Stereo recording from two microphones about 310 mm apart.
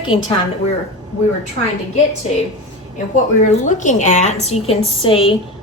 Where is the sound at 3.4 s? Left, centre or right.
Left.